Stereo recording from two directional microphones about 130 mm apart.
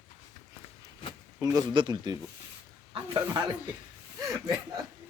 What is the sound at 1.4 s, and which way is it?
Speech, 30° right (ahead or behind).